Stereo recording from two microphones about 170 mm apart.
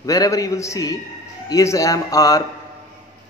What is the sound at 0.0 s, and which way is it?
A man's voice, 20° left (ahead or behind).